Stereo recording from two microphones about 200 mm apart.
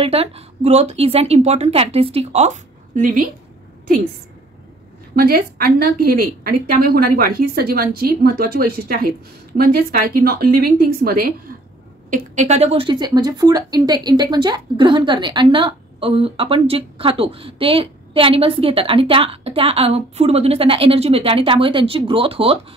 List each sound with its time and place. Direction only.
0.0 s a woman's voice: 30° right (ahead or behind)
5.1 s a woman's voice: 50° right (ahead or behind); by 22.6 s 30° right (ahead or behind)